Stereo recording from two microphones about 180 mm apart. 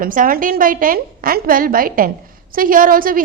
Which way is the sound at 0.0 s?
50° right (ahead or behind).